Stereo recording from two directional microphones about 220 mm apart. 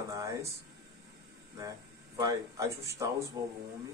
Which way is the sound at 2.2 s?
15° right (ahead or behind).